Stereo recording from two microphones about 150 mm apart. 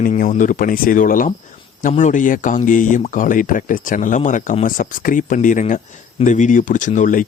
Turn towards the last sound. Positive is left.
turn(degrees=60)  # may be behind; listen again after turning